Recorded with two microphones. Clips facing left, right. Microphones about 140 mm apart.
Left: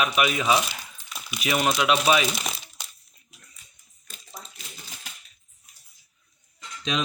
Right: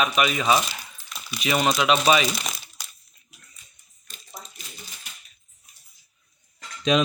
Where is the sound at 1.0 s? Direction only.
15° left (ahead or behind).